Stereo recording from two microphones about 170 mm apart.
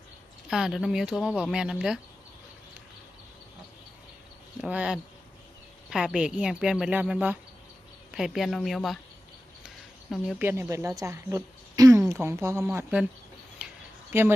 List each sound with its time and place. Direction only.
0.4 s speech: 5° right (ahead or behind)
4.6 s a woman's voice: 5° right (ahead or behind)
12.7 s a woman's voice: 5° right (ahead or behind)
13.6 s a sound: 5° right (ahead or behind)
14.1 s speech: 15° right (ahead or behind)